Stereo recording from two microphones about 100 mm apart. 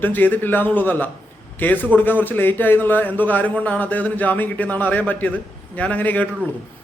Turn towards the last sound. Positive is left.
turn(degrees=15)  # may be behind; listen again after turning